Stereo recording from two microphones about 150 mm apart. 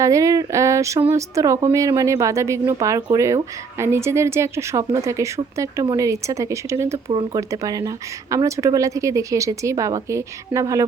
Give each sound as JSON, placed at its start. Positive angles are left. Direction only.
{"t": 0.0, "sound": "a woman's voice", "side_deg": -20}